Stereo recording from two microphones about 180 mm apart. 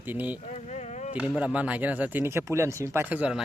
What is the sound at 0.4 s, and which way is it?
Insect, 40° left (ahead or behind).